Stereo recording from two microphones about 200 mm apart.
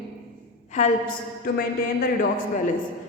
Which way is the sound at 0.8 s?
35° left (ahead or behind).